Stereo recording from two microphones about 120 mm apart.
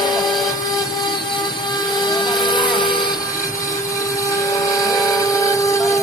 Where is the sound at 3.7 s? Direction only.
25° left (ahead or behind).